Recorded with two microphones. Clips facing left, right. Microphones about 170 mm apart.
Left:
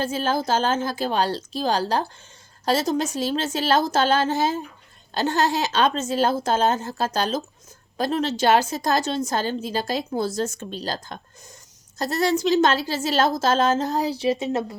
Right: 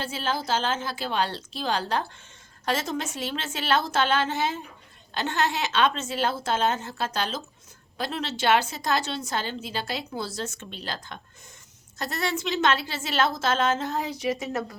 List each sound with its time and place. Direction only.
0.0 s a woman's voice: 45° left (ahead or behind); by 14.8 s 25° left (ahead or behind)